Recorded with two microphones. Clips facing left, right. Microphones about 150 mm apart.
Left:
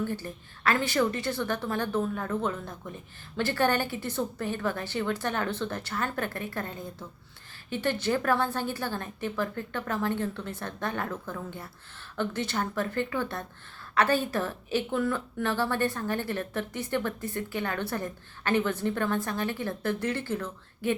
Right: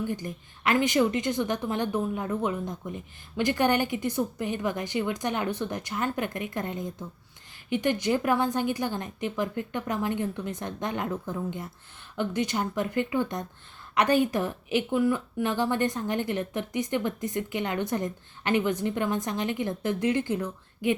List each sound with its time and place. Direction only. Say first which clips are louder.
0.0 s a woman's voice: right 1 dB; 15° right (ahead or behind)